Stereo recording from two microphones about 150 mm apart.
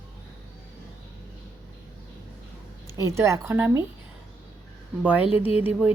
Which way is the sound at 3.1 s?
20° right (ahead or behind).